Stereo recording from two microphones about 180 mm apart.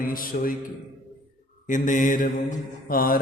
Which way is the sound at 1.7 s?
45° left (ahead or behind).